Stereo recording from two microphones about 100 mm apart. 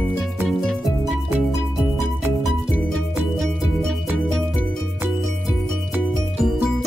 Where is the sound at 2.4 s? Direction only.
Centre (ahead or behind).